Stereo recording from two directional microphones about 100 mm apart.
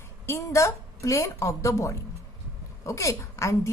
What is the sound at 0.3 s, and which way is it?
A woman's voice, 30° left (ahead or behind).